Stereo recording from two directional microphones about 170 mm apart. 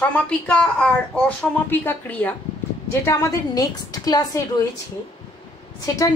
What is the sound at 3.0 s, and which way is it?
A woman's voice, 20° left (ahead or behind).